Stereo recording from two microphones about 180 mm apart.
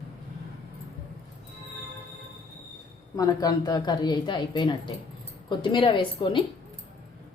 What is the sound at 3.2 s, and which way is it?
Speech, 20° left (ahead or behind).